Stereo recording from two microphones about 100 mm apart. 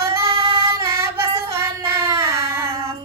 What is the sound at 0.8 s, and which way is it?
Child singing, 25° right (ahead or behind).